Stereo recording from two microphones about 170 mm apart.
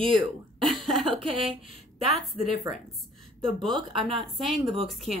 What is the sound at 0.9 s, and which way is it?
Speech, 35° right (ahead or behind).